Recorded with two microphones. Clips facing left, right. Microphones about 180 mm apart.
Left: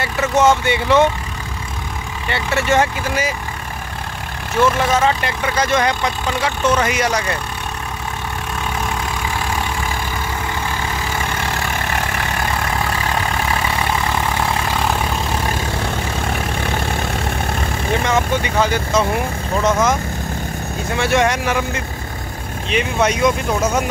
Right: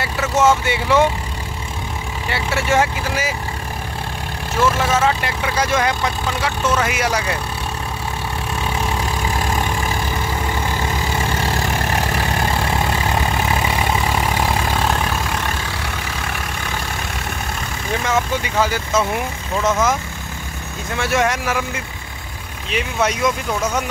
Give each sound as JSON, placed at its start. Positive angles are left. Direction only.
{"t": 0.0, "sound": "speech", "side_deg": -5}
{"t": 2.2, "sound": "speech", "side_deg": -5}
{"t": 4.8, "sound": "speech", "side_deg": -5}
{"t": 12.5, "sound": "vehicle", "side_deg": -25}
{"t": 13.7, "sound": "vehicle", "side_deg": -10}
{"t": 14.9, "sound": "vehicle", "side_deg": 10}
{"t": 16.2, "sound": "vehicle", "side_deg": 30}
{"t": 18.0, "sound": "speech", "side_deg": -5}
{"t": 21.0, "sound": "speech", "side_deg": 0}